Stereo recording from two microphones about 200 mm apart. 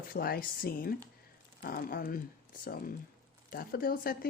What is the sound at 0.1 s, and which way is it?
Speech, 50° left (ahead or behind).